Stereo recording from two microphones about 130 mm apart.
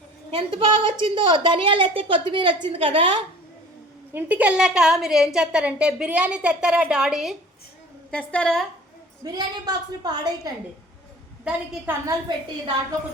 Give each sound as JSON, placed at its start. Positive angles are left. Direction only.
{"t": 0.3, "sound": "a woman's voice", "side_deg": -40}
{"t": 4.1, "sound": "a woman's voice", "side_deg": -15}
{"t": 8.1, "sound": "a woman's voice", "side_deg": 10}
{"t": 9.2, "sound": "a woman's voice", "side_deg": -30}
{"t": 11.9, "sound": "a woman's voice", "side_deg": -15}
{"t": 12.3, "sound": "a woman's voice", "side_deg": -35}